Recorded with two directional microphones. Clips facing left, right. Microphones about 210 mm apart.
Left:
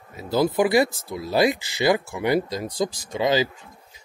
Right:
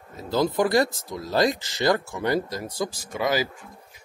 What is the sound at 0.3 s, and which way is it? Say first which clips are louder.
Speech: left 2 dB; 10° left (ahead or behind).